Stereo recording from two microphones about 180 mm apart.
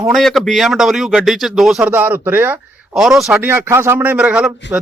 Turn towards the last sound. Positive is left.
turn(degrees=-5)  # may be behind; listen again after turning